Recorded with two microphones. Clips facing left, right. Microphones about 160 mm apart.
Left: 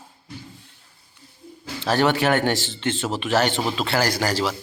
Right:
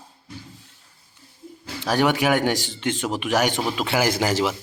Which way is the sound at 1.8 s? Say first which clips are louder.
Even; 10° right (ahead or behind).